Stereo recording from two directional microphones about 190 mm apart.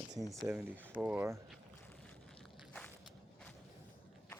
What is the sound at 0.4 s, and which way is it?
Speech, 5° right (ahead or behind).